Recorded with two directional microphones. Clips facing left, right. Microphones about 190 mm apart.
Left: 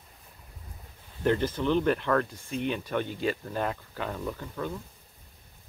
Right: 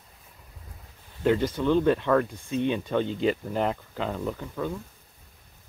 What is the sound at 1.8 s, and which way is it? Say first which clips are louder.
Speech: right 4 dB; 15° right (ahead or behind).